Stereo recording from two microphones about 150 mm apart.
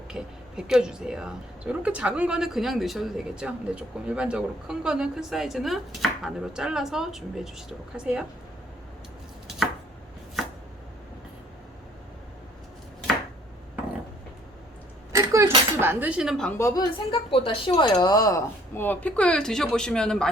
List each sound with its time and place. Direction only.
0.1 s speech: 5° right (ahead or behind)
15.1 s a sound: 20° right (ahead or behind); by 16.5 s centre (ahead or behind)
16.5 s a woman's voice: 20° left (ahead or behind)
17.1 s speech: 35° left (ahead or behind); by 20.3 s 5° left (ahead or behind)